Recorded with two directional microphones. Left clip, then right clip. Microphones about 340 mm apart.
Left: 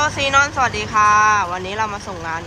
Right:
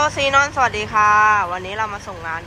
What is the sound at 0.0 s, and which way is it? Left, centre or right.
Speech, centre.